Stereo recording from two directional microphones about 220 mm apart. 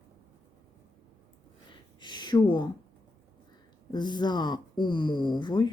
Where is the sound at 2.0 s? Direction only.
20° left (ahead or behind).